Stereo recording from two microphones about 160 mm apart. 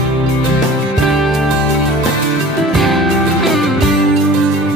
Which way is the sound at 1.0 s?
Centre (ahead or behind).